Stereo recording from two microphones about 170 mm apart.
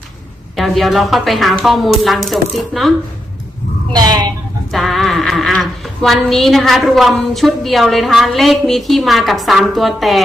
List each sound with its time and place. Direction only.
0.5 s a woman's voice: centre (ahead or behind)
3.9 s speech: 25° right (ahead or behind)
4.7 s a woman's voice: centre (ahead or behind)